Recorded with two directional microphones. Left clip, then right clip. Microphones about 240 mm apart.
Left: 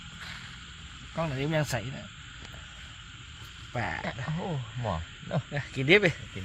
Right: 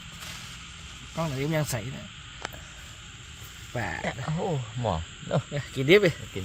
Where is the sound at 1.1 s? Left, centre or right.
Centre.